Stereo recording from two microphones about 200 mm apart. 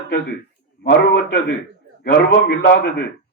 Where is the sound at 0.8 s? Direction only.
55° left (ahead or behind).